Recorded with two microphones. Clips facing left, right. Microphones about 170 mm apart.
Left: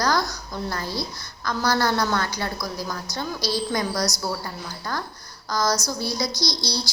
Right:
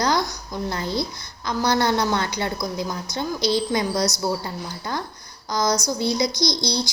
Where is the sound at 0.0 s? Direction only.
20° right (ahead or behind).